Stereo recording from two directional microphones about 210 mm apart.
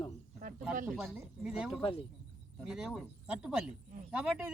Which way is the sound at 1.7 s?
25° left (ahead or behind).